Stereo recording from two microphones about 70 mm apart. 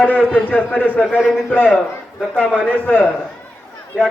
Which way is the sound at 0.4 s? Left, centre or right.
Left.